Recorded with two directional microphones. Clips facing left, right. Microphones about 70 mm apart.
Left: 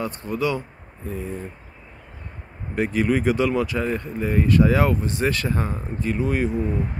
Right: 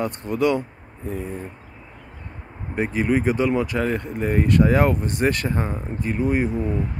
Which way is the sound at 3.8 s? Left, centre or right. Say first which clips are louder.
Right 1 dB; right.